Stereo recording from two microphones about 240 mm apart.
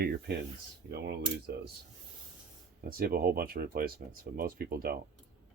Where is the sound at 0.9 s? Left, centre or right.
Right.